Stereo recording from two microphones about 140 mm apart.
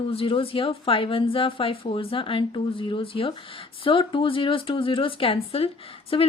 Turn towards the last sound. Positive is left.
turn(degrees=40)  # may be behind; listen again after turning